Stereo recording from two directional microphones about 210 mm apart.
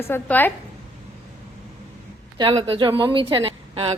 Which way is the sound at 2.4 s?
25° right (ahead or behind).